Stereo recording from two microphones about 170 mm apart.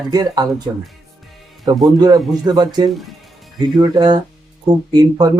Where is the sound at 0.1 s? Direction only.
20° right (ahead or behind).